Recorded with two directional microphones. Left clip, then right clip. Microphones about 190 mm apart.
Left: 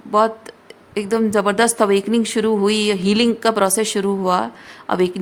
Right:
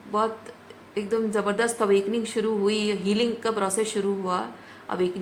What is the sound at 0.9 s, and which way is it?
A woman's voice, 55° left (ahead or behind).